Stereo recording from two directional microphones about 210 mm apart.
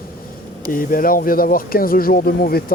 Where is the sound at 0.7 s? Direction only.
45° left (ahead or behind).